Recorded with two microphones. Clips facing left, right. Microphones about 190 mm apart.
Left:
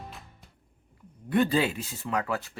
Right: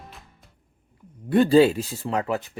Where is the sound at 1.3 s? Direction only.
30° right (ahead or behind).